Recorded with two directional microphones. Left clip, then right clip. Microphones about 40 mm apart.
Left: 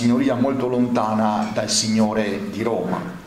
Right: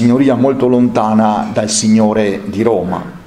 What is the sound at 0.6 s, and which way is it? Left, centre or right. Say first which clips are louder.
A man's voice: right 9 dB; right.